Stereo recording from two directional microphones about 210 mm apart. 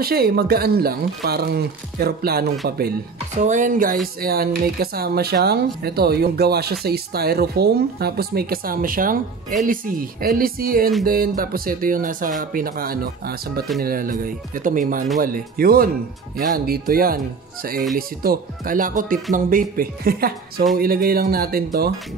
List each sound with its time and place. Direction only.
0.0 s speech: 45° right (ahead or behind)
3.3 s speech: 35° right (ahead or behind)